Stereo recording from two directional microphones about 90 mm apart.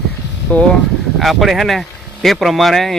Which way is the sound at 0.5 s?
15° left (ahead or behind).